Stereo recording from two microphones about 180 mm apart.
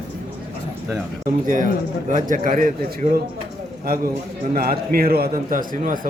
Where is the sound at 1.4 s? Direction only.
45° right (ahead or behind).